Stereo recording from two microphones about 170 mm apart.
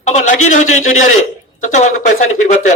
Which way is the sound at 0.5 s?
45° left (ahead or behind).